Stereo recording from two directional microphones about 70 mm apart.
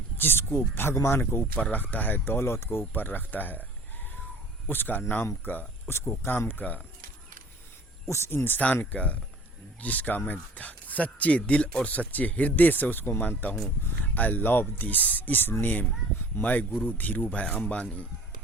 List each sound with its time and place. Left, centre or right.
0.2 s speech: left
4.7 s speech: left
8.1 s speech: left; by 18.0 s centre